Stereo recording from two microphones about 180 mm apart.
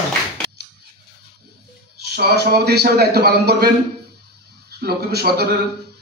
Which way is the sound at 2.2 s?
60° right (ahead or behind).